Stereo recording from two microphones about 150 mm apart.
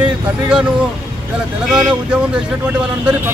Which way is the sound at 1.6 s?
5° right (ahead or behind).